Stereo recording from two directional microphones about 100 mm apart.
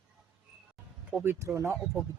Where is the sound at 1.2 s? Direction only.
25° right (ahead or behind).